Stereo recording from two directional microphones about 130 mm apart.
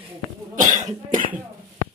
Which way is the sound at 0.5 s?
85° right.